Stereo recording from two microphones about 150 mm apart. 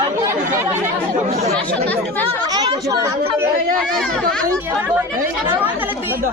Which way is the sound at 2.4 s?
25° right (ahead or behind).